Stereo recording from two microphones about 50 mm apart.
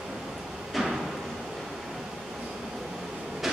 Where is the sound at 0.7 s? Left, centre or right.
Centre.